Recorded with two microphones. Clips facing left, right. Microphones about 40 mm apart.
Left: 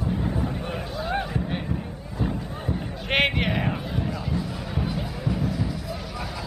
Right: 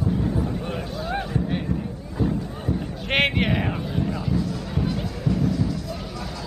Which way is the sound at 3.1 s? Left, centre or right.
Centre.